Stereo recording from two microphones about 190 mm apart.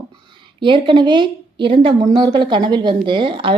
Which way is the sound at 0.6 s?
25° right (ahead or behind).